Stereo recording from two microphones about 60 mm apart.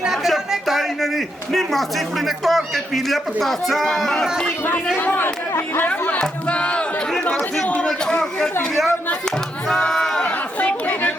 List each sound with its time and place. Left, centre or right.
0.1 s a man's voice: centre
4.9 s speech: left
5.5 s chatter: left
5.9 s music: left
7.9 s a sound: centre
9.6 s crowd: centre
10.2 s chatter: left